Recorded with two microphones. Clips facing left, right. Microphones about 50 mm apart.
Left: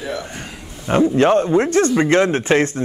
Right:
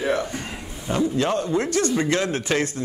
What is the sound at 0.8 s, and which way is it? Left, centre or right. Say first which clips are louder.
A man's voice: left 8 dB; left.